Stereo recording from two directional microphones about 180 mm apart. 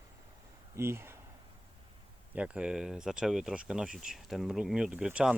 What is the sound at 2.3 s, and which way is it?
Speech, 5° right (ahead or behind).